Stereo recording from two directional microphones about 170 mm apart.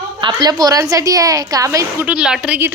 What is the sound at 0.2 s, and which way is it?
A woman's voice, 25° right (ahead or behind).